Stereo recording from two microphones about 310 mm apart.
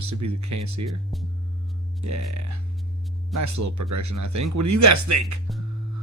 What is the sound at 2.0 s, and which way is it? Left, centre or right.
Speech, right.